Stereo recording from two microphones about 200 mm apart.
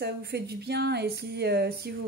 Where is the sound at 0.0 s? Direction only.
55° right (ahead or behind).